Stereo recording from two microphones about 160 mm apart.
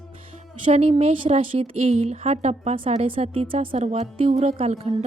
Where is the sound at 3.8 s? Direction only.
45° right (ahead or behind).